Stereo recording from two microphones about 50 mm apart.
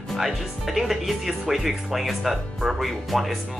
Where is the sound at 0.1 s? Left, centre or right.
Centre.